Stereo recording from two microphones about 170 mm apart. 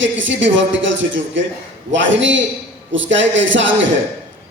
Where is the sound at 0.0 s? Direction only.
90° right.